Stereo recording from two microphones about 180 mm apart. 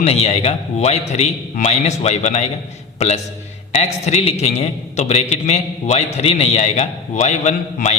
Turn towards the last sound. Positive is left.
turn(degrees=40)  # may be behind; listen again after turning